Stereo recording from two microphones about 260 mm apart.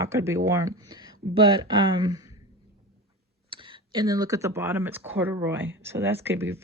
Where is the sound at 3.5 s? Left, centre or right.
Centre.